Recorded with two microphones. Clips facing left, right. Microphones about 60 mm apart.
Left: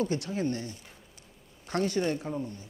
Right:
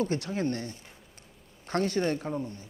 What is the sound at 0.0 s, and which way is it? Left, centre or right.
Speech, right.